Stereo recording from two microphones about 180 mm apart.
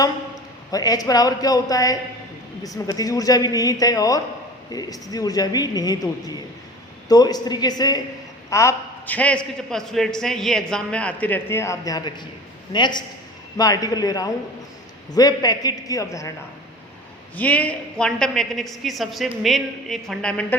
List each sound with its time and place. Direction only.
0.7 s a woman's voice: 20° left (ahead or behind)
17.3 s a woman's voice: 10° left (ahead or behind)